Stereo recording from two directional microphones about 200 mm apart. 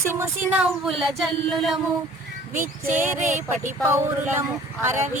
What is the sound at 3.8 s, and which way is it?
Speech, 10° right (ahead or behind).